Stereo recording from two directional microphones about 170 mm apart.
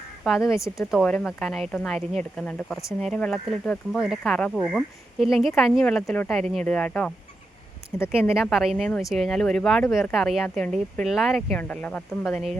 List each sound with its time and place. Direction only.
0.3 s speech: centre (ahead or behind)